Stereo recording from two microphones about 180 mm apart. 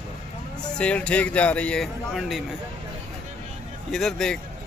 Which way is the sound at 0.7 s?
5° left (ahead or behind).